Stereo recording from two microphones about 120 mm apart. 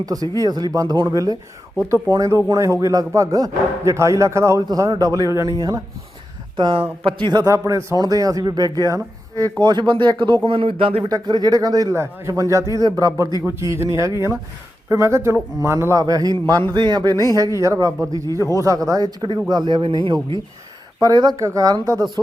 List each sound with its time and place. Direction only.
0.0 s speech: 30° right (ahead or behind)
7.4 s speech: 25° right (ahead or behind); by 11.0 s 45° right (ahead or behind)
11.1 s speech: 35° right (ahead or behind)
18.3 s speech: 25° left (ahead or behind)
18.6 s speech: 30° right (ahead or behind)